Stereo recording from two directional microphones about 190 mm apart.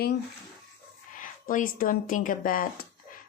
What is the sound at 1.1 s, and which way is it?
Speech, 45° left (ahead or behind).